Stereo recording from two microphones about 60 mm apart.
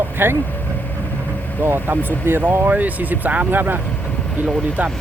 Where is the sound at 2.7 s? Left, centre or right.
Right.